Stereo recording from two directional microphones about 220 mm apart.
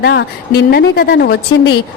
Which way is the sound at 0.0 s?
50° left (ahead or behind).